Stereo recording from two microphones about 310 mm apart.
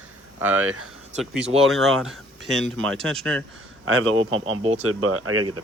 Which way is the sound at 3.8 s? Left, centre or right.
Right.